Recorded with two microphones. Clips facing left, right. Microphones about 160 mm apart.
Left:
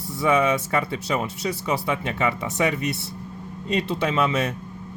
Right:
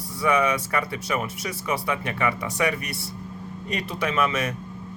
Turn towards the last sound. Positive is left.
turn(degrees=30)  # may be behind; listen again after turning